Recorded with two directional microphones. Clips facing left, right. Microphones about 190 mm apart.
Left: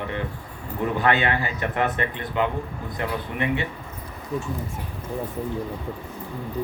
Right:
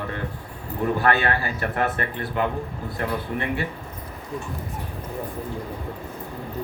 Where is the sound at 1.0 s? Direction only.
20° left (ahead or behind).